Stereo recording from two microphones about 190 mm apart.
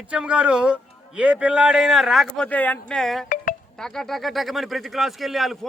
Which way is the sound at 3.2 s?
45° left (ahead or behind).